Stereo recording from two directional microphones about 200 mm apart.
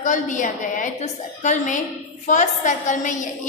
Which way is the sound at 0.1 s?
40° left (ahead or behind).